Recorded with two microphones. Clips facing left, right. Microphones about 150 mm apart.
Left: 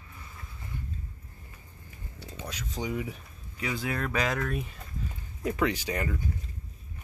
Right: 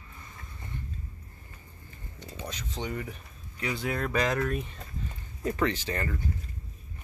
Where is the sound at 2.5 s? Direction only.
10° left (ahead or behind).